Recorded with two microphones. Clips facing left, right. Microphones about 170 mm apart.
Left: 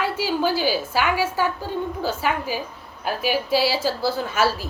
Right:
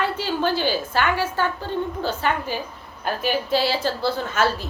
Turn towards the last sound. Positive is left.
turn(degrees=10)  # may be behind; listen again after turning